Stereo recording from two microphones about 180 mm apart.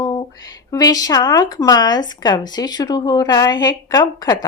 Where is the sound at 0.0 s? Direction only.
25° left (ahead or behind).